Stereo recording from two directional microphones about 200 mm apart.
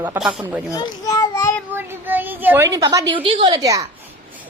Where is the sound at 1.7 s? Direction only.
10° right (ahead or behind).